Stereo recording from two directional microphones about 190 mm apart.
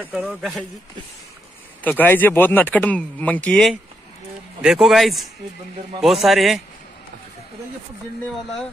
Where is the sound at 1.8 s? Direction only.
10° left (ahead or behind).